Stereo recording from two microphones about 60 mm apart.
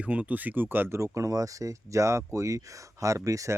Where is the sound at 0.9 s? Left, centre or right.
Right.